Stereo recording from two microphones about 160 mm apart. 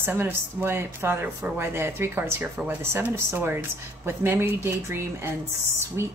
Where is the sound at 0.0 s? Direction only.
15° right (ahead or behind).